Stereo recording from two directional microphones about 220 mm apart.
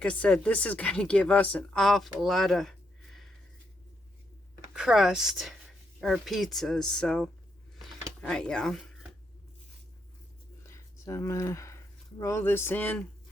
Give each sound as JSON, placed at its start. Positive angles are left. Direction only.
{"t": 0.0, "sound": "speech", "side_deg": 5}
{"t": 4.7, "sound": "speech", "side_deg": 0}
{"t": 10.7, "sound": "a sound", "side_deg": 15}
{"t": 12.2, "sound": "speech", "side_deg": 10}